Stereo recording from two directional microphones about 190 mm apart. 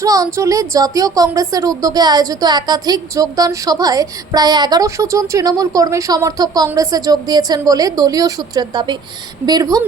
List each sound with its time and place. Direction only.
0.0 s a woman's voice: 15° right (ahead or behind)